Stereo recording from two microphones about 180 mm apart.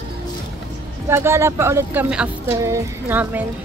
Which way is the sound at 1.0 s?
15° right (ahead or behind).